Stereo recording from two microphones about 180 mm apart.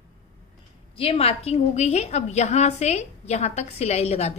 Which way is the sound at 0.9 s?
30° left (ahead or behind).